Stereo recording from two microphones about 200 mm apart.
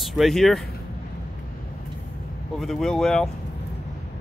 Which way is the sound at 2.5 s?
Centre (ahead or behind).